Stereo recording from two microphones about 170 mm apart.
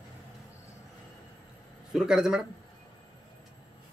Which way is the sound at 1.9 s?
5° right (ahead or behind).